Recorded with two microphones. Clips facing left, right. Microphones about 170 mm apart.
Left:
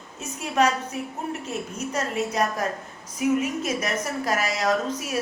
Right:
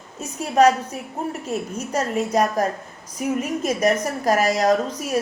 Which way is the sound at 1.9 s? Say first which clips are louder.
Right 5 dB; 40° right (ahead or behind).